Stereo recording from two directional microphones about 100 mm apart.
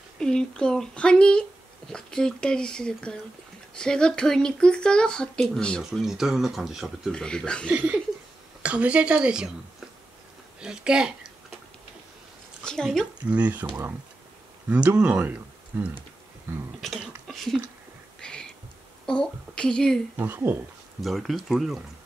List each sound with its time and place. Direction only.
0.2 s speech: 10° left (ahead or behind)
7.1 s speech: 5° left (ahead or behind)
7.7 s speech: 15° right (ahead or behind)
10.6 s speech: 10° right (ahead or behind)
12.6 s speech: 5° left (ahead or behind)
13.3 s speech: 15° right (ahead or behind)
14.7 s speech: 15° right (ahead or behind)
15.7 s speech: 20° right (ahead or behind)
16.8 s speech: centre (ahead or behind)
18.2 s a sound: 10° left (ahead or behind)
19.0 s speech: 10° left (ahead or behind)
20.2 s speech: 20° right (ahead or behind)
21.0 s speech: centre (ahead or behind)